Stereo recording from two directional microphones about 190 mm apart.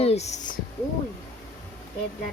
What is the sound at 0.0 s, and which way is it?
Speech, 35° left (ahead or behind).